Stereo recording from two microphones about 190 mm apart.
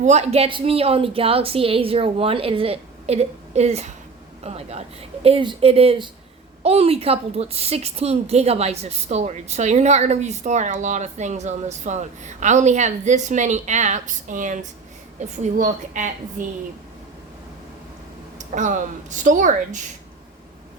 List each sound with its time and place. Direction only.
0.0 s a woman's voice: 35° right (ahead or behind)
18.3 s a woman's voice: 40° right (ahead or behind)